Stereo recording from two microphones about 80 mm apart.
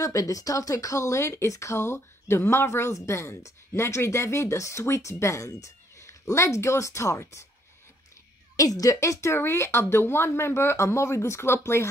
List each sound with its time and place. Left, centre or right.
0.0 s speech: left
8.5 s speech: left